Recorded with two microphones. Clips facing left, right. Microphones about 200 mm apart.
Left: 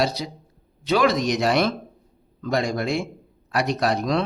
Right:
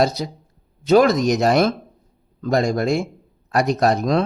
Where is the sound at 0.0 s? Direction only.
45° right (ahead or behind).